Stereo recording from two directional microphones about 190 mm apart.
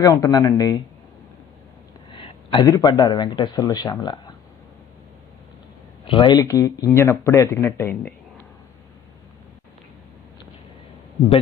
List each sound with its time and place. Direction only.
0.0 s speech: 15° left (ahead or behind)
2.1 s speech: 25° left (ahead or behind)
6.0 s speech: 20° left (ahead or behind)